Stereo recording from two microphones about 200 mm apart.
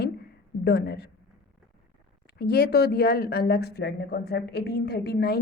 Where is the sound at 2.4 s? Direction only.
50° left (ahead or behind).